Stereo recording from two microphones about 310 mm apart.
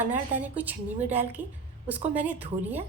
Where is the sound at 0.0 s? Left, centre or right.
Centre.